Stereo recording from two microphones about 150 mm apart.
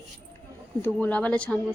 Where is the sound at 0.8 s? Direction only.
10° left (ahead or behind).